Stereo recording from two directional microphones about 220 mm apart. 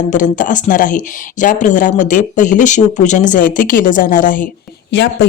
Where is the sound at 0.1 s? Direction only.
35° left (ahead or behind).